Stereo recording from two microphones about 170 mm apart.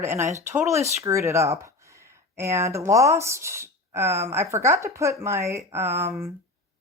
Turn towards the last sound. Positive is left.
turn(degrees=-15)  # may be behind; listen again after turning